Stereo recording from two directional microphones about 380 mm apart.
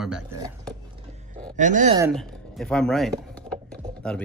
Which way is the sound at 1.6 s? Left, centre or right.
Centre.